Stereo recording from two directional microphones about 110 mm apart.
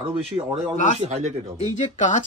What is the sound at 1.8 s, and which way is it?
Speech, 90° left.